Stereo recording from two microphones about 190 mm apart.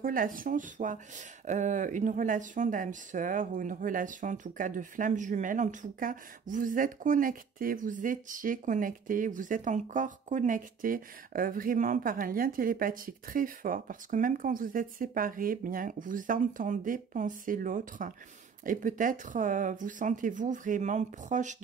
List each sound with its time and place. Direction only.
0.0 s speech: 45° right (ahead or behind)